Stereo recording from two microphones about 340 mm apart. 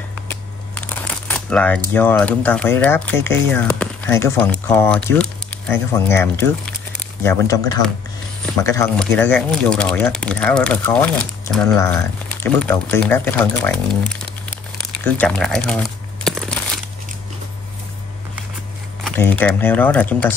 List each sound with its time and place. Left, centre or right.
0.3 s crumpling: centre
2.0 s speech: centre
15.0 s speech: centre
16.3 s a sound: centre
19.0 s speech: centre